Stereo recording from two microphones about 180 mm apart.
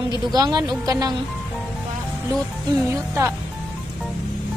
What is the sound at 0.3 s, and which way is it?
Speech, 20° right (ahead or behind).